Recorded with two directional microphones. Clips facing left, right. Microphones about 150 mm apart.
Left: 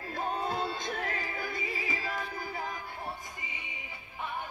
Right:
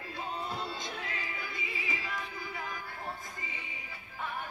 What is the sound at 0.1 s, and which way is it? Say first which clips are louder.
Music: left 5 dB; 50° left (ahead or behind).